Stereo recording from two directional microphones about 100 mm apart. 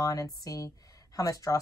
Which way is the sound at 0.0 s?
35° left (ahead or behind).